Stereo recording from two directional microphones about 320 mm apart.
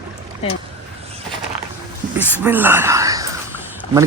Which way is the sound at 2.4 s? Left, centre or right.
Centre.